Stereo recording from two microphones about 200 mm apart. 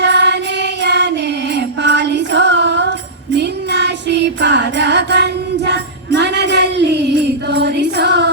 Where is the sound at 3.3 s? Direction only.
60° right (ahead or behind).